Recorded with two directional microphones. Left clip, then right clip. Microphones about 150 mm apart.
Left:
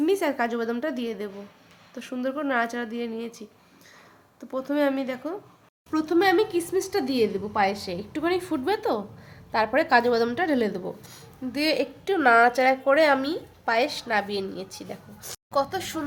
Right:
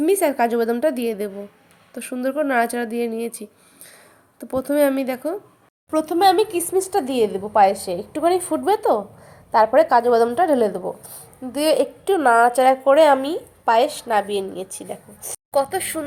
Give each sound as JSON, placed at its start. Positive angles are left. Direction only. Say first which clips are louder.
{"t": 0.0, "sound": "a woman's voice", "louder": "right 6 dB", "side_deg": -25}